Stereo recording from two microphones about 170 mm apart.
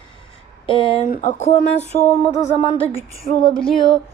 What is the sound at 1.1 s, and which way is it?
Speech, 50° left (ahead or behind).